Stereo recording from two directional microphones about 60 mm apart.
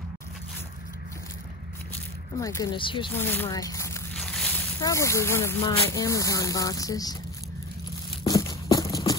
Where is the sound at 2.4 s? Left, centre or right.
Left.